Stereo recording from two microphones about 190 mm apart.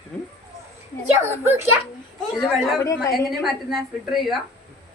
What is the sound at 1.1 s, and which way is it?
Speech, 15° right (ahead or behind).